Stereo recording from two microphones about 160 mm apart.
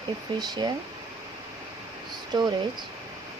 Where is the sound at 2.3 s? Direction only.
25° right (ahead or behind).